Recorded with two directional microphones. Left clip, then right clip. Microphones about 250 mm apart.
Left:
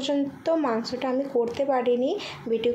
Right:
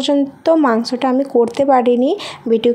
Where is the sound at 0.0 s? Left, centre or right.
Right.